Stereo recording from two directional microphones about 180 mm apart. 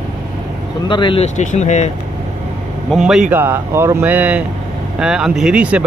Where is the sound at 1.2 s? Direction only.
40° left (ahead or behind).